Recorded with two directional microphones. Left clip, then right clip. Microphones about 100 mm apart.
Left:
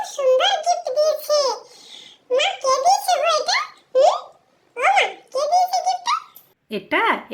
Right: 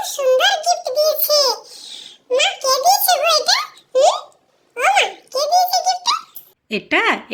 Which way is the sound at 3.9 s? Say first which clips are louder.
Right 1 dB; 10° right (ahead or behind).